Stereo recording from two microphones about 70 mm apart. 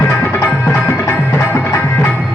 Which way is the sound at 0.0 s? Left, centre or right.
Left.